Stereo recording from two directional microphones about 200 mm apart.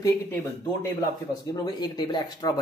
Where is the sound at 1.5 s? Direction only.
20° left (ahead or behind).